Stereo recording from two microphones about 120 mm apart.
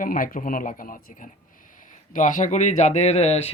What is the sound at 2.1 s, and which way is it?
Speech, 90° left.